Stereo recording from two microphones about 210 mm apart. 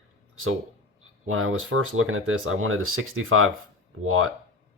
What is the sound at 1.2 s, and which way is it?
Speech, 80° right.